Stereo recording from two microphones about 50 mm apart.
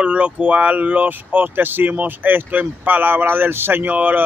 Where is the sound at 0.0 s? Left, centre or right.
Right.